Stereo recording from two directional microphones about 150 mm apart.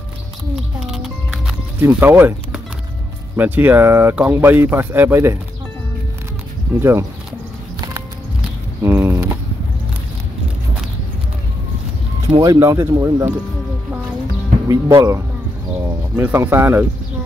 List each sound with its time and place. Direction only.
0.7 s music: centre (ahead or behind)
1.8 s speech: 15° right (ahead or behind)
6.8 s speech: 15° right (ahead or behind)
8.8 s a sound: 15° right (ahead or behind)
12.4 s speech: 20° right (ahead or behind)
14.7 s speech: 20° right (ahead or behind)